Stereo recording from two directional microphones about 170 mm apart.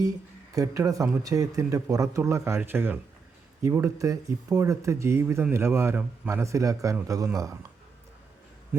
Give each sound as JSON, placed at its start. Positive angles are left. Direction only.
{"t": 0.5, "sound": "speech", "side_deg": -20}